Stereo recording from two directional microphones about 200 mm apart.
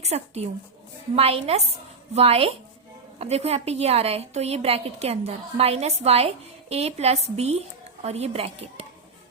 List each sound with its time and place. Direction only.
0.0 s a woman's voice: 30° right (ahead or behind)